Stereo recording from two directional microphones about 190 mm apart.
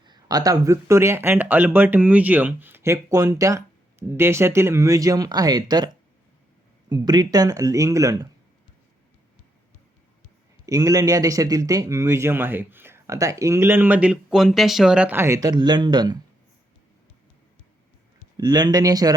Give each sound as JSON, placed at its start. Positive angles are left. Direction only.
{"t": 0.0, "sound": "a man's voice", "side_deg": -20}
{"t": 10.7, "sound": "a man's voice", "side_deg": -15}
{"t": 18.3, "sound": "speech", "side_deg": -20}